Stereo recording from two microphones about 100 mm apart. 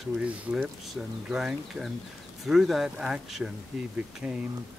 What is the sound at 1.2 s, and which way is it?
Speech, 5° right (ahead or behind).